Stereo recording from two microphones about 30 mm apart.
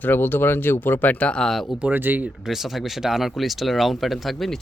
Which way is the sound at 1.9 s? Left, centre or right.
Right.